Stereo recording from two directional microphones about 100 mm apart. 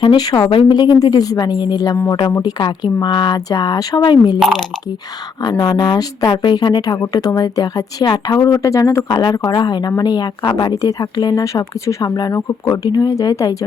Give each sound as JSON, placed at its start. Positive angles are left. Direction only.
{"t": 0.0, "sound": "speech", "side_deg": 50}
{"t": 5.4, "sound": "speech", "side_deg": 45}
{"t": 9.0, "sound": "speech", "side_deg": 45}